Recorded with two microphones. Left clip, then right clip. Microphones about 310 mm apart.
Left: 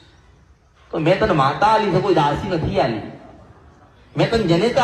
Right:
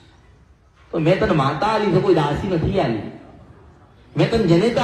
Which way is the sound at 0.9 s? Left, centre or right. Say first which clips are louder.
Left 1 dB; left.